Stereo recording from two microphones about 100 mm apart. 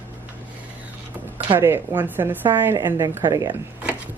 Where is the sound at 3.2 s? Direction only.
35° right (ahead or behind).